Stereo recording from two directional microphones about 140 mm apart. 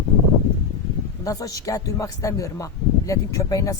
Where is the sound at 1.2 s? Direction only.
25° left (ahead or behind).